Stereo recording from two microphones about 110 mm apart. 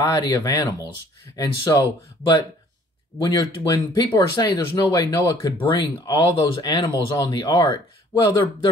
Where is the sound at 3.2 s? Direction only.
35° left (ahead or behind).